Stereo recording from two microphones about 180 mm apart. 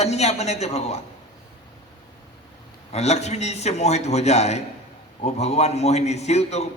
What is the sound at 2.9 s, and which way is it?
A man's voice, 35° left (ahead or behind).